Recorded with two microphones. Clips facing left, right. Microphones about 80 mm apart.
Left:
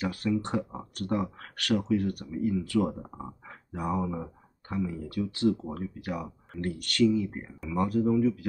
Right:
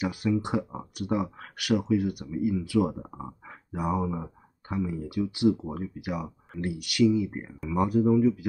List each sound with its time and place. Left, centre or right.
0.0 s speech: centre